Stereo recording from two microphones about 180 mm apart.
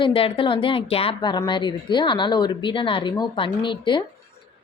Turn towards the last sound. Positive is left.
turn(degrees=25)  # may be behind; listen again after turning